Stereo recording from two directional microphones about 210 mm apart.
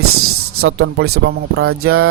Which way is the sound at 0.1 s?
90° right.